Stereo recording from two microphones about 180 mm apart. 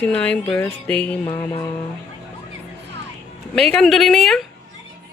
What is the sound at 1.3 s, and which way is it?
Music, 20° left (ahead or behind).